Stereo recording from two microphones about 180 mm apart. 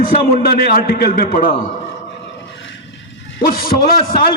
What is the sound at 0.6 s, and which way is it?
Speech, 60° left (ahead or behind).